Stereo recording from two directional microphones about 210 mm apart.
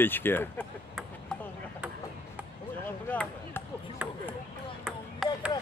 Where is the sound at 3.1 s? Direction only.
10° left (ahead or behind).